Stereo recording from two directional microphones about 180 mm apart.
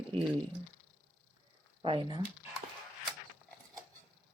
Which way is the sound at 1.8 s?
25° right (ahead or behind).